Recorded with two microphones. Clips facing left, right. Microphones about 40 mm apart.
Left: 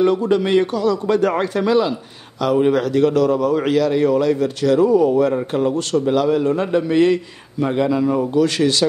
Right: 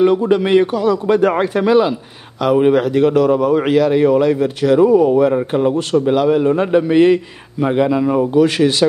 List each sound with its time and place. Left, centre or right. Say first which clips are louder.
0.0 s a man's voice: right 3 dB; centre